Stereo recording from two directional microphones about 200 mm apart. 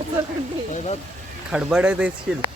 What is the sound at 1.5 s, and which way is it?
Speech, 5° right (ahead or behind).